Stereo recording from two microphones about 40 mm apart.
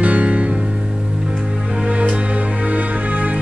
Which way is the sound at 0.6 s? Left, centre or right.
Centre.